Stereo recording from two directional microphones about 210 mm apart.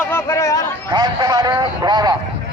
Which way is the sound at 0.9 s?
20° right (ahead or behind).